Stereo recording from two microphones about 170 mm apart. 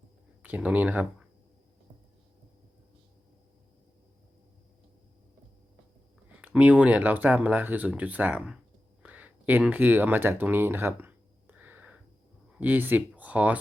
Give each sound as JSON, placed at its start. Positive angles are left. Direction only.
{"t": 0.4, "sound": "speech", "side_deg": -10}
{"t": 6.3, "sound": "speech", "side_deg": -10}
{"t": 9.0, "sound": "a sound", "side_deg": -10}
{"t": 12.5, "sound": "speech", "side_deg": -10}